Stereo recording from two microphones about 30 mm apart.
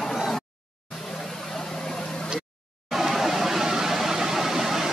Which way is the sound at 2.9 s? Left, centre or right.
Centre.